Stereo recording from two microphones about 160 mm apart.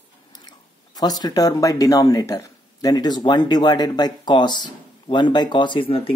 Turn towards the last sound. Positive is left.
turn(degrees=35)  # may be behind; listen again after turning